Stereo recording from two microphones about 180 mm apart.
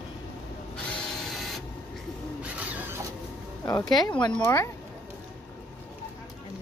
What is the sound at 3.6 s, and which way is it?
Speech, 20° left (ahead or behind).